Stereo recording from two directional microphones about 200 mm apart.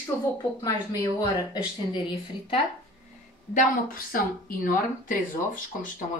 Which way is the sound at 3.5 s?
45° left (ahead or behind).